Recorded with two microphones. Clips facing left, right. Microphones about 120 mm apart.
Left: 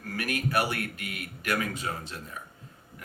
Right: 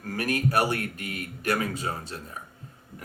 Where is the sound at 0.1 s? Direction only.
40° right (ahead or behind).